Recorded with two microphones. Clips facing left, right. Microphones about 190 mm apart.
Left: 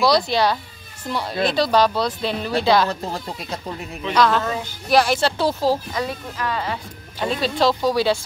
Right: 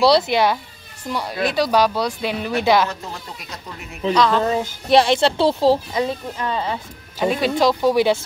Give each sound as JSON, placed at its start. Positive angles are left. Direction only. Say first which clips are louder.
{"t": 0.0, "sound": "speech", "louder": "right 2 dB", "side_deg": -25}
{"t": 2.9, "sound": "speech", "louder": "left 5 dB", "side_deg": 35}
{"t": 4.1, "sound": "speech", "louder": "right 1 dB", "side_deg": 5}
{"t": 4.5, "sound": "speech", "louder": "right 4 dB", "side_deg": -25}